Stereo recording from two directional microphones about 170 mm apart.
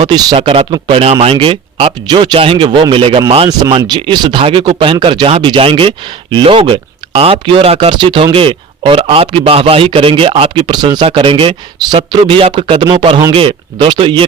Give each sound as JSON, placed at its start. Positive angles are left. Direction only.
{"t": 0.0, "sound": "speech", "side_deg": -30}